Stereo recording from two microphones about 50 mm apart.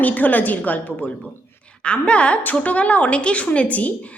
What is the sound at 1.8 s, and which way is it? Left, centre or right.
A woman's voice, left.